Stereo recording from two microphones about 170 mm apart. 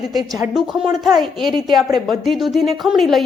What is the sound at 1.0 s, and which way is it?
Speech, centre (ahead or behind).